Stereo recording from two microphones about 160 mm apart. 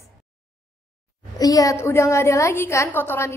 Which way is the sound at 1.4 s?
20° left (ahead or behind).